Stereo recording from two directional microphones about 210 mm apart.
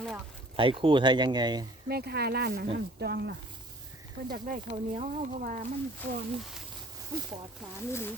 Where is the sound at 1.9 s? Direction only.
50° right (ahead or behind).